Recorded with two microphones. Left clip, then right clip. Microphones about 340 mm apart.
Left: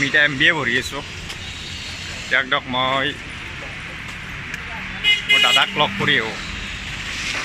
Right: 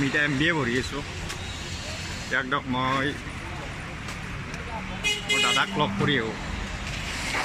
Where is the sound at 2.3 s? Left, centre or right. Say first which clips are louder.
Left 7 dB; centre.